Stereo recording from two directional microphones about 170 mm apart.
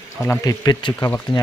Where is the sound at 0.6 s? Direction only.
25° left (ahead or behind).